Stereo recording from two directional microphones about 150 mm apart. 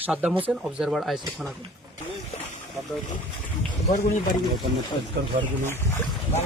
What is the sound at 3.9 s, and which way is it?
Speech, 55° left (ahead or behind).